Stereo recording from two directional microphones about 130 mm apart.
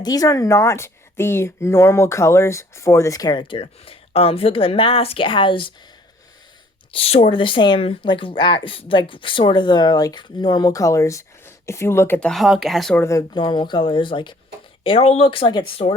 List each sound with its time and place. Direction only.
0.0 s speech: 30° left (ahead or behind)
6.9 s speech: 50° left (ahead or behind); by 12.3 s 15° left (ahead or behind)
12.3 s speech: centre (ahead or behind)
13.0 s speech: 25° left (ahead or behind)
13.3 s speech: 35° left (ahead or behind)
14.8 s speech: 50° left (ahead or behind)